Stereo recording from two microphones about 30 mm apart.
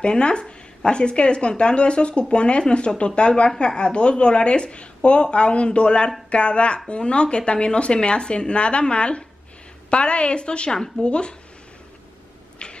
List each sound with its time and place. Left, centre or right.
0.0 s speech: left